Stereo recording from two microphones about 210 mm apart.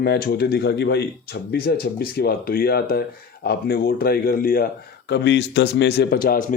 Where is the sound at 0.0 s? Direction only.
50° left (ahead or behind).